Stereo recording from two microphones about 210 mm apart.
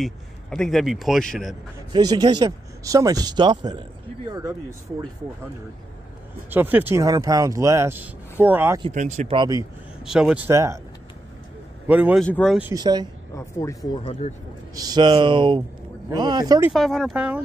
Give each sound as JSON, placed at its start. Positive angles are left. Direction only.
{"t": 0.0, "sound": "a man's voice", "side_deg": 0}
{"t": 1.9, "sound": "speech", "side_deg": -20}
{"t": 6.5, "sound": "speech", "side_deg": -10}
{"t": 8.8, "sound": "speech", "side_deg": -35}
{"t": 9.4, "sound": "speech", "side_deg": -15}
{"t": 10.0, "sound": "speech", "side_deg": -5}
{"t": 11.9, "sound": "speech", "side_deg": -5}
{"t": 12.3, "sound": "speech", "side_deg": 5}
{"t": 12.7, "sound": "speech", "side_deg": -20}
{"t": 13.9, "sound": "speech", "side_deg": 25}
{"t": 14.8, "sound": "speech", "side_deg": -20}
{"t": 16.7, "sound": "a man's voice", "side_deg": 0}